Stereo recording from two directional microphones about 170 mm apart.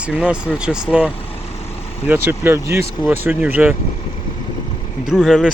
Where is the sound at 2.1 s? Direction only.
15° right (ahead or behind).